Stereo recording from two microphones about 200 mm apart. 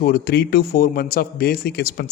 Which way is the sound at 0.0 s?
50° left (ahead or behind).